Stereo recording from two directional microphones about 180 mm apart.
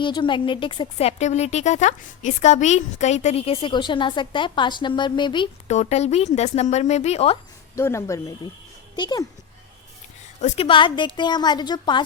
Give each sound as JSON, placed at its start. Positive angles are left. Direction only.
{"t": 0.0, "sound": "a woman's voice", "side_deg": 25}
{"t": 5.6, "sound": "speech", "side_deg": 40}
{"t": 7.8, "sound": "a woman's voice", "side_deg": 15}
{"t": 10.4, "sound": "a woman's voice", "side_deg": 35}